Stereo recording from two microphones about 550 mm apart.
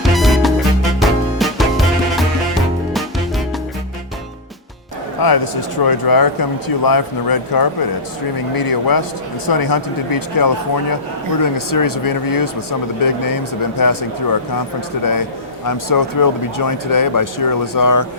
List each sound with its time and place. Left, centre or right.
0.0 s music: centre
5.2 s speech: left